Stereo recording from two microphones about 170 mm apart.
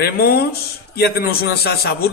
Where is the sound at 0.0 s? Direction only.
65° left (ahead or behind).